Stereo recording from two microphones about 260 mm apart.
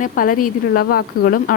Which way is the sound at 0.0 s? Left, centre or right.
Left.